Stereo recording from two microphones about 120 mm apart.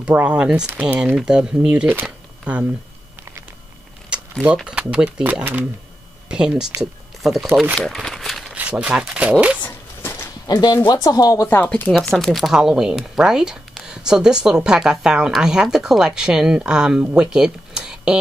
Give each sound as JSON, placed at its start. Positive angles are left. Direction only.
{"t": 0.0, "sound": "speech", "side_deg": -10}
{"t": 4.1, "sound": "a sound", "side_deg": -10}
{"t": 4.6, "sound": "speech", "side_deg": -10}
{"t": 7.7, "sound": "crumpling", "side_deg": 0}
{"t": 8.5, "sound": "speech", "side_deg": -10}
{"t": 10.4, "sound": "speech", "side_deg": 35}
{"t": 11.4, "sound": "speech", "side_deg": 15}
{"t": 11.9, "sound": "speech", "side_deg": 5}